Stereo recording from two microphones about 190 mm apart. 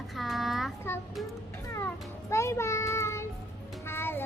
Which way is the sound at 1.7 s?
15° left (ahead or behind).